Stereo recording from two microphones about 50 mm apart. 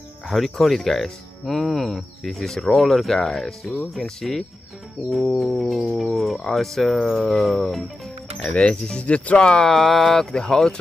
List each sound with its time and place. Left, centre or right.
0.3 s speech: centre
8.5 s speech: centre
9.7 s speech: centre